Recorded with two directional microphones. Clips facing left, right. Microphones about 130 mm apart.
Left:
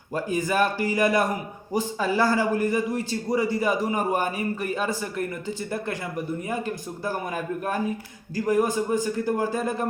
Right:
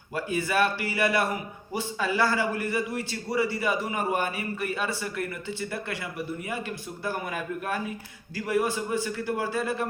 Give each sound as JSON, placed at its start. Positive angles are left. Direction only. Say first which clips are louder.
{"t": 0.1, "sound": "a man's voice", "louder": "left 3 dB", "side_deg": 40}